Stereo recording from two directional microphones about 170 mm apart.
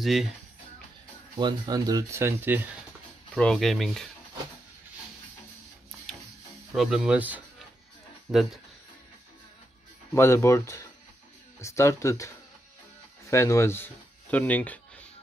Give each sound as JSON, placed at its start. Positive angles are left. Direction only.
{"t": 0.0, "sound": "speech", "side_deg": 0}
{"t": 1.4, "sound": "speech", "side_deg": -20}
{"t": 3.3, "sound": "speech", "side_deg": 5}
{"t": 6.7, "sound": "speech", "side_deg": -5}
{"t": 10.1, "sound": "speech", "side_deg": 15}
{"t": 13.3, "sound": "speech", "side_deg": 15}